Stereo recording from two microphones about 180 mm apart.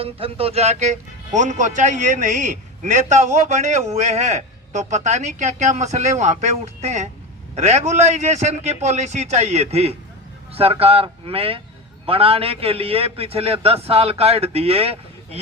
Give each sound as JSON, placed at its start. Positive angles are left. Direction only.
{"t": 0.0, "sound": "speech", "side_deg": -30}